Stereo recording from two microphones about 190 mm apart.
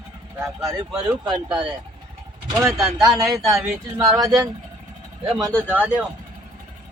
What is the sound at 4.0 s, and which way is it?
Speech, 20° right (ahead or behind).